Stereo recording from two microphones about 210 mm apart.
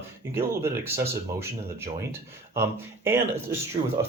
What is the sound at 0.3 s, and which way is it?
Speech, 10° right (ahead or behind).